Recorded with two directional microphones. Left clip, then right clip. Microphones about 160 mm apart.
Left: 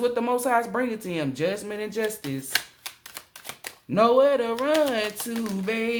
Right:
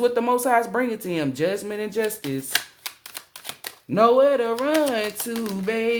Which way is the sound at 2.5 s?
15° right (ahead or behind).